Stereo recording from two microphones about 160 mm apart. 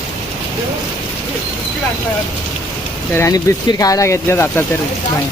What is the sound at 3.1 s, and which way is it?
Speech, 15° left (ahead or behind).